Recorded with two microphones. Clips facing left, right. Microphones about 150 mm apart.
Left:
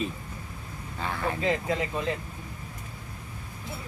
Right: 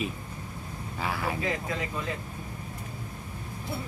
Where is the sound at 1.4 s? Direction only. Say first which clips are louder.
Left 4 dB; 25° left (ahead or behind).